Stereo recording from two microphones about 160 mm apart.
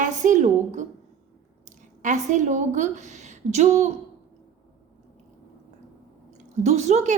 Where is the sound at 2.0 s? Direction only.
50° right (ahead or behind).